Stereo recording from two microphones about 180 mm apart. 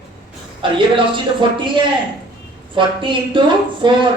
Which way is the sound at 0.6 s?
25° right (ahead or behind).